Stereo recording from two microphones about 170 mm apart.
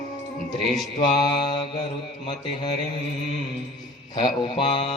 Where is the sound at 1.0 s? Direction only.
25° left (ahead or behind).